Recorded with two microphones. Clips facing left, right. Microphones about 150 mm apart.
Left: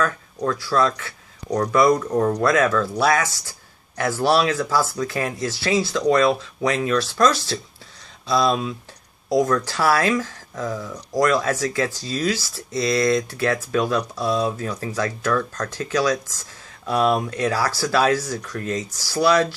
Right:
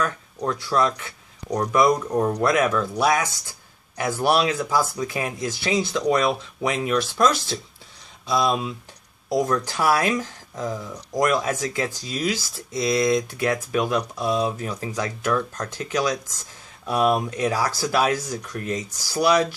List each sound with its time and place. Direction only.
0.0 s speech: 20° right (ahead or behind)